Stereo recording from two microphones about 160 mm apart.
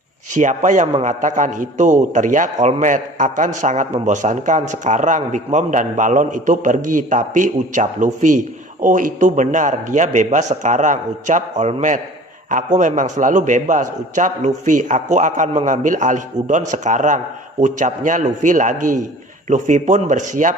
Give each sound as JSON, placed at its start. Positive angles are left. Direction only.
{"t": 0.3, "sound": "a man's voice", "side_deg": -50}